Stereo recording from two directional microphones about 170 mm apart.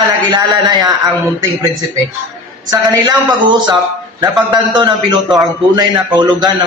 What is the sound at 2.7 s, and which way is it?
A man's voice, 25° right (ahead or behind).